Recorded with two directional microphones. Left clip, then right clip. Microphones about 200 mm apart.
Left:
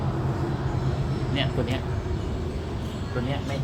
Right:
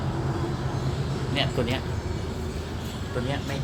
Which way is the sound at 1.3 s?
25° right (ahead or behind).